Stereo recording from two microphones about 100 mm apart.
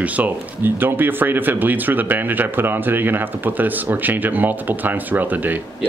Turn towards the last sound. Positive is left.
turn(degrees=-15)  # may be behind; listen again after turning